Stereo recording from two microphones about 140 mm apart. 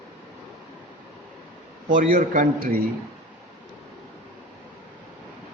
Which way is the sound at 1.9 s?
65° right (ahead or behind).